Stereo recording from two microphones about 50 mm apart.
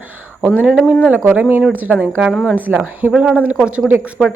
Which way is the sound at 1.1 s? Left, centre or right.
Right.